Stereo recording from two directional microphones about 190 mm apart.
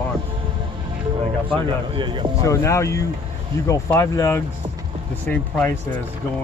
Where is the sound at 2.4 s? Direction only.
15° left (ahead or behind).